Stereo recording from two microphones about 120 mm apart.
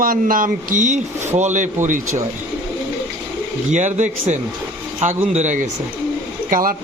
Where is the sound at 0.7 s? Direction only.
85° right.